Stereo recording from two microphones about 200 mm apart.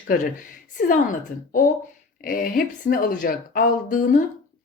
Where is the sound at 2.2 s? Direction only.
45° left (ahead or behind).